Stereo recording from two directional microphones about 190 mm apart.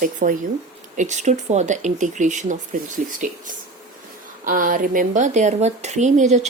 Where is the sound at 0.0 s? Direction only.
45° right (ahead or behind).